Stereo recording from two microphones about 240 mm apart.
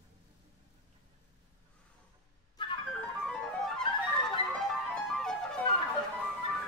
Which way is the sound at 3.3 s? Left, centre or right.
Centre.